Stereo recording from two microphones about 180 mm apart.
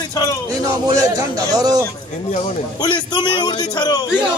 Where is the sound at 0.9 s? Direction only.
20° right (ahead or behind).